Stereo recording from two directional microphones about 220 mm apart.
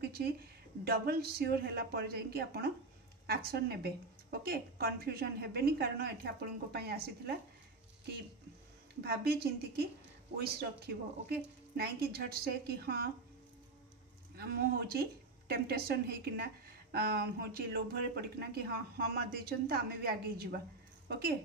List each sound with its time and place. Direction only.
0.0 s a sound: 45° right (ahead or behind)
0.8 s speech: 45° right (ahead or behind)
9.0 s speech: 45° right (ahead or behind)
11.2 s speech: 45° right (ahead or behind)
14.3 s speech: 45° right (ahead or behind)